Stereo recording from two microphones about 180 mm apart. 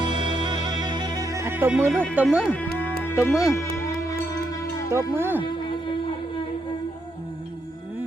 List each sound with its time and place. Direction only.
0.0 s music: 25° right (ahead or behind)
2.1 s speech: 5° right (ahead or behind)
3.0 s music: 15° left (ahead or behind)
3.2 s speech: 5° right (ahead or behind)
4.9 s speech: 15° right (ahead or behind)